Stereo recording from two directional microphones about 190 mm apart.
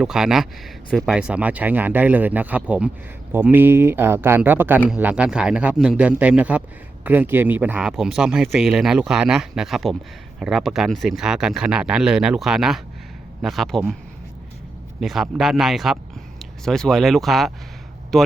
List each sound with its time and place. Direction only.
0.0 s a man's voice: 5° right (ahead or behind)
15.0 s a man's voice: centre (ahead or behind)